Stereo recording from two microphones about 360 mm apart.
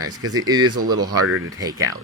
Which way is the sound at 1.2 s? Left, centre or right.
Right.